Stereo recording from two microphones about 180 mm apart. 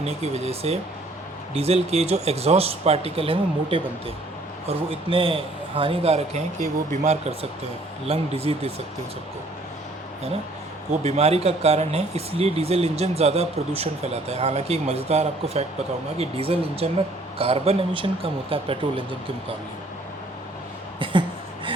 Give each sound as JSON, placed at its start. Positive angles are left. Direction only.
{"t": 0.0, "sound": "speech", "side_deg": -35}
{"t": 10.9, "sound": "speech", "side_deg": -35}
{"t": 21.0, "sound": "a sound", "side_deg": -30}